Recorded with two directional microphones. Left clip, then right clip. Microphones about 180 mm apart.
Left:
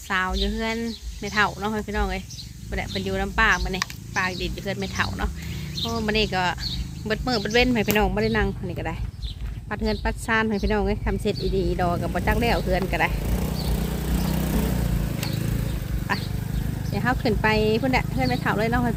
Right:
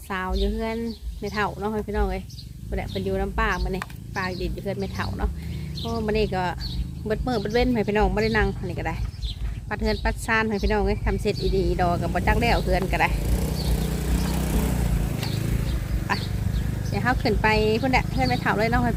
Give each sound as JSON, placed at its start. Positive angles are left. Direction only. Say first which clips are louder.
{"t": 0.1, "sound": "speech", "louder": "left 3 dB", "side_deg": 0}
{"t": 6.1, "sound": "speech", "louder": "left 3 dB", "side_deg": -5}
{"t": 13.2, "sound": "vehicle", "louder": "even", "side_deg": 35}
{"t": 16.1, "sound": "wild animals", "louder": "even", "side_deg": 5}
{"t": 16.9, "sound": "speech", "louder": "even", "side_deg": 0}